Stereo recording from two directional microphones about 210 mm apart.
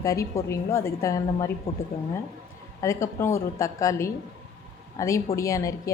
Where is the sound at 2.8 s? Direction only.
15° left (ahead or behind).